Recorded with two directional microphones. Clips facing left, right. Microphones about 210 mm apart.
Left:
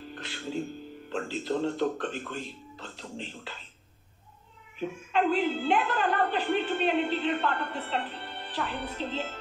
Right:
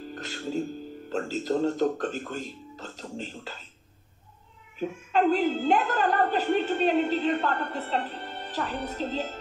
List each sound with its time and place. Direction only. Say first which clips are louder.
0.0 s speech: right 4 dB; 40° right (ahead or behind)
4.7 s a woman's voice: right 3 dB; 40° right (ahead or behind)